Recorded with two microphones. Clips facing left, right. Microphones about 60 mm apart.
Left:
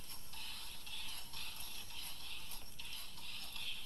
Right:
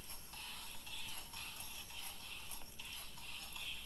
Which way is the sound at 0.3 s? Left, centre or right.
Centre.